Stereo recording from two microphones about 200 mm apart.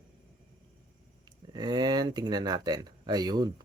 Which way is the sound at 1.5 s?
20° right (ahead or behind).